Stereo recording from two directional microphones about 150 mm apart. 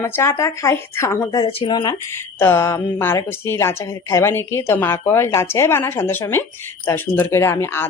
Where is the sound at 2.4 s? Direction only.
15° left (ahead or behind).